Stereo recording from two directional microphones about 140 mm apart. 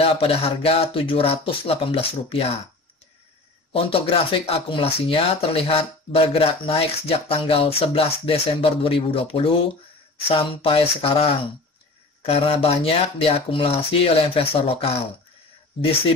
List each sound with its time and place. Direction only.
0.0 s speech: 45° left (ahead or behind)
3.7 s speech: 45° left (ahead or behind)